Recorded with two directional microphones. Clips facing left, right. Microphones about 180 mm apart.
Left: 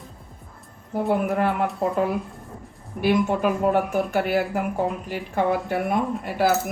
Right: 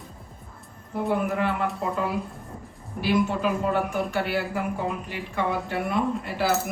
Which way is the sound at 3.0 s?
50° left (ahead or behind).